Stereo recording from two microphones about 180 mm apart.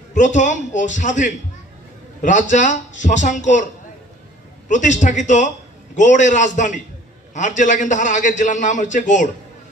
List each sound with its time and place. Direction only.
0.1 s a man's voice: 45° left (ahead or behind)
2.5 s a man's voice: 45° left (ahead or behind)
4.6 s a man's voice: 45° left (ahead or behind)